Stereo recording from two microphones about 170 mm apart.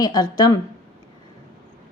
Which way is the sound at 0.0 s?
25° left (ahead or behind).